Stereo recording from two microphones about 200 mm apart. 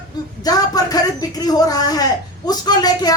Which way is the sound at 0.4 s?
20° left (ahead or behind).